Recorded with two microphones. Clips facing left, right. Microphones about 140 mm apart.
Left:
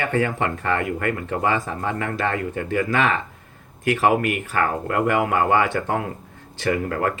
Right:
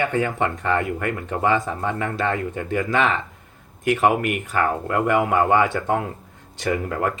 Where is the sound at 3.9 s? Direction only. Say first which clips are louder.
Even; 20° right (ahead or behind).